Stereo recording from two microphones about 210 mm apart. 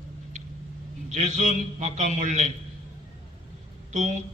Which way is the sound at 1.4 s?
35° right (ahead or behind).